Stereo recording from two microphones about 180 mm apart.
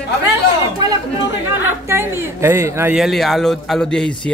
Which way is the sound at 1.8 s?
15° right (ahead or behind).